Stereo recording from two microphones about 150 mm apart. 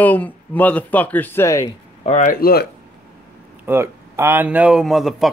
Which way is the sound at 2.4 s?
90° left.